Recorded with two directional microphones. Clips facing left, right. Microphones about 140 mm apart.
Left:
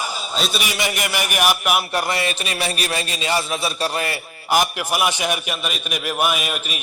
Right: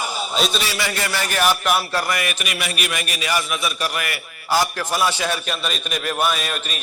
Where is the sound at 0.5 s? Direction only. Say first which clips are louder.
Even; 15° left (ahead or behind).